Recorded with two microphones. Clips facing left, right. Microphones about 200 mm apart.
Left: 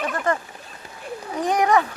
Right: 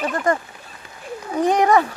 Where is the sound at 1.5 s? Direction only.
30° right (ahead or behind).